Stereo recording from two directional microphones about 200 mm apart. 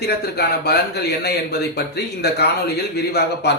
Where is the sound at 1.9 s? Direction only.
55° left (ahead or behind).